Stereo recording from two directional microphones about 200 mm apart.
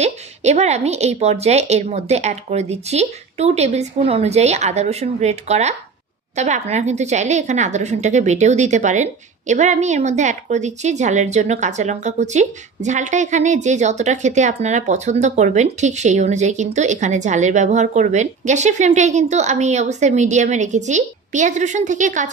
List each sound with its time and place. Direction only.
0.0 s a woman's voice: 35° right (ahead or behind)